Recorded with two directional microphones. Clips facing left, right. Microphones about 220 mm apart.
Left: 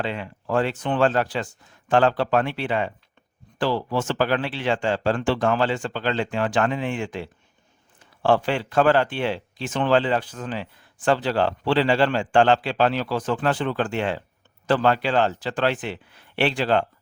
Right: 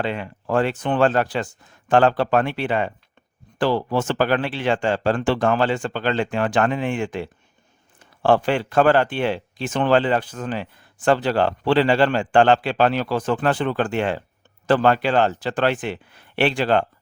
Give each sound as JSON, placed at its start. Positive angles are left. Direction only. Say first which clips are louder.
{"t": 0.0, "sound": "speech", "louder": "right 3 dB", "side_deg": -55}